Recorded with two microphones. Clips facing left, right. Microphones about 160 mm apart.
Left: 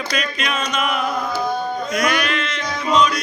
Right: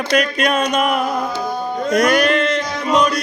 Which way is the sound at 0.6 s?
45° right (ahead or behind).